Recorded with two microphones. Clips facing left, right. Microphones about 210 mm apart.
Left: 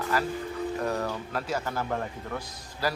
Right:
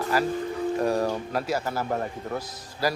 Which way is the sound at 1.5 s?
10° right (ahead or behind).